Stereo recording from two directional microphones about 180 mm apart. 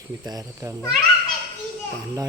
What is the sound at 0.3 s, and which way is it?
Speech, 20° right (ahead or behind).